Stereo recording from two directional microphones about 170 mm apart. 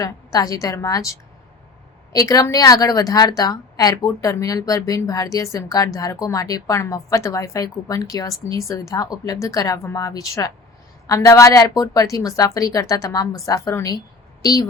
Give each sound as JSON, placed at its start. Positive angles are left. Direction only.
{"t": 0.0, "sound": "a woman's voice", "side_deg": 20}
{"t": 2.1, "sound": "a woman's voice", "side_deg": 20}